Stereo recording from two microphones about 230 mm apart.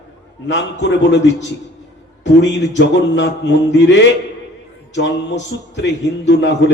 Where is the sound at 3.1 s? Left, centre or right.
Left.